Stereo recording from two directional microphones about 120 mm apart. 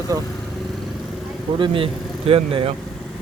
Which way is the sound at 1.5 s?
45° right (ahead or behind).